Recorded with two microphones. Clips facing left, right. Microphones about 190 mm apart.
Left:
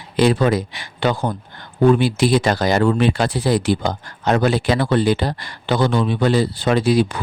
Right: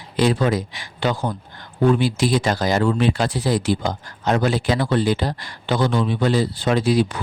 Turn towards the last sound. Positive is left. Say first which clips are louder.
# left 2 dB
turn(degrees=65)  # may be behind; listen again after turning